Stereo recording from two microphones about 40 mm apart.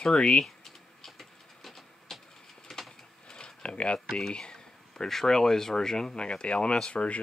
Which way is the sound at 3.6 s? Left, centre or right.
Left.